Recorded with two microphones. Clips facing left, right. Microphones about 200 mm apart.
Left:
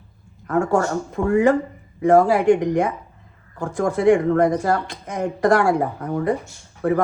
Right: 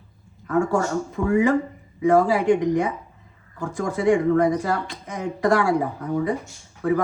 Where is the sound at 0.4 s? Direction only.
50° left (ahead or behind).